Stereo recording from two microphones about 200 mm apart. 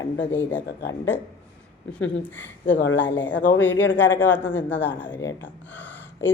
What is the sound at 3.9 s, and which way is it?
Speech, 10° left (ahead or behind).